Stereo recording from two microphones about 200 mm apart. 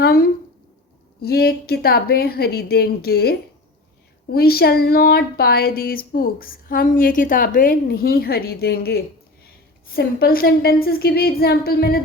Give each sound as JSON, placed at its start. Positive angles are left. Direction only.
{"t": 0.0, "sound": "speech", "side_deg": 50}